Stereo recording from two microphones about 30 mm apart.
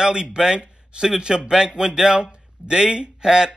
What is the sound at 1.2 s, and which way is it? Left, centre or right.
Speech, right.